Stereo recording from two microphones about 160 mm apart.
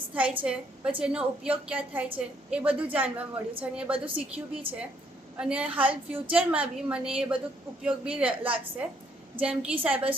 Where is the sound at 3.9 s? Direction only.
35° right (ahead or behind).